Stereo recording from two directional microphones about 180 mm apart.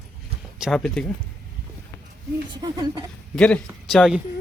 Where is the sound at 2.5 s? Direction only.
20° right (ahead or behind).